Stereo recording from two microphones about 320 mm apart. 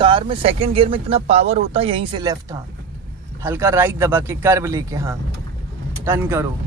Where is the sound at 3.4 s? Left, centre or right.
Centre.